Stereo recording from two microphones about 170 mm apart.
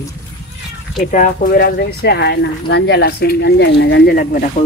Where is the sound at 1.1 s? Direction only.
50° left (ahead or behind).